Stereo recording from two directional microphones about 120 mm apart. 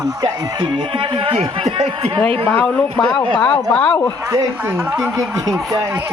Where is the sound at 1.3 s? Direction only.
55° right (ahead or behind).